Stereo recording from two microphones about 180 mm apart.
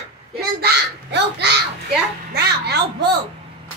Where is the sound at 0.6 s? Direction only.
70° right (ahead or behind).